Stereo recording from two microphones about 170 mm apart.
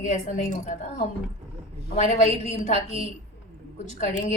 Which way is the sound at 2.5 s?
45° left (ahead or behind).